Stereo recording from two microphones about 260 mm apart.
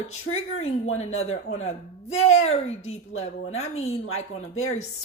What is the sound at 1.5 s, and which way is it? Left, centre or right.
Speech, left.